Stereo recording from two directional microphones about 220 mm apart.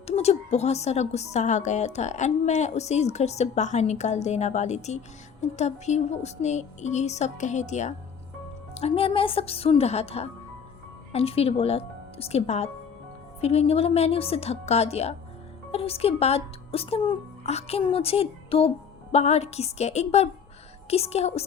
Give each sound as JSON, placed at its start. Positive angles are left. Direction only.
{"t": 0.2, "sound": "a woman's voice", "side_deg": 30}